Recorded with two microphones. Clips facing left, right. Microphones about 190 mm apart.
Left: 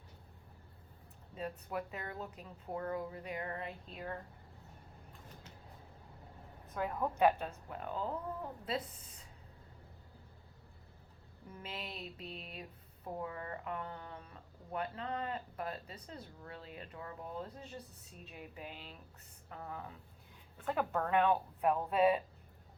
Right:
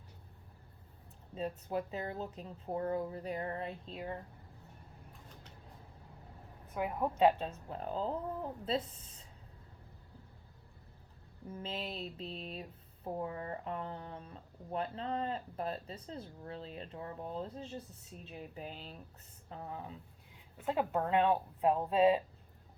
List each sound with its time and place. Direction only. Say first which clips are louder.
1.4 s speech: right 4 dB; 25° right (ahead or behind)
6.7 s a woman's voice: right 2 dB; 20° right (ahead or behind)
11.6 s speech: right 4 dB; 30° right (ahead or behind)
19.5 s speech: right 2 dB; 25° right (ahead or behind)